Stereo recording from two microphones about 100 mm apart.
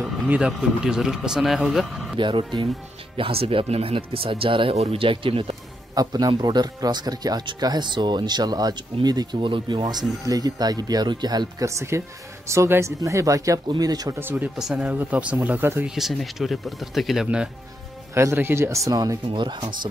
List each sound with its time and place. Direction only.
0.3 s speech: 5° right (ahead or behind)
2.1 s speech: 55° right (ahead or behind)
3.2 s speech: 70° right (ahead or behind)
5.9 s speech: 40° right (ahead or behind)
11.9 s speech: 30° right (ahead or behind)
14.2 s speech: 20° right (ahead or behind)
14.6 s speech: 5° right (ahead or behind)
15.9 s speech: centre (ahead or behind)
18.1 s speech: 25° right (ahead or behind)
19.2 s speech: 50° right (ahead or behind)